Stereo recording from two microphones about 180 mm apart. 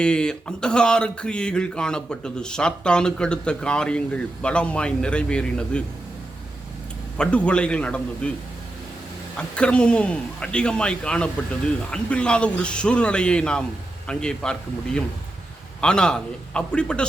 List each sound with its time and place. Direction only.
0.0 s speech: 5° left (ahead or behind)
7.2 s speech: 5° left (ahead or behind)
9.6 s speech: 5° left (ahead or behind)
15.8 s speech: 5° left (ahead or behind)